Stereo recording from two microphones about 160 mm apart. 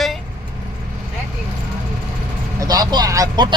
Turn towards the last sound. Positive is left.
turn(degrees=-25)  # may be behind; listen again after turning